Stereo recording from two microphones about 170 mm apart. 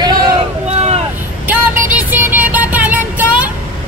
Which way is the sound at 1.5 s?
10° right (ahead or behind).